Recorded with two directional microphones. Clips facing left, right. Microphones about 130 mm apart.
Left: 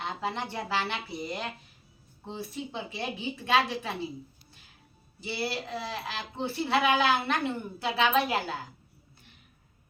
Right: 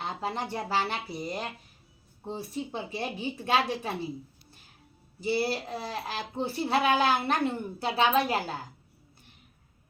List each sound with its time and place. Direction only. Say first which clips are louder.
0.0 s speech: even; 40° right (ahead or behind)
5.2 s speech: right 5 dB; 45° right (ahead or behind)